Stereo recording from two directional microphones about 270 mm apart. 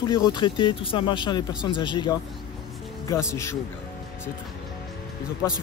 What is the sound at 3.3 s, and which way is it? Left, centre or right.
Speech, centre.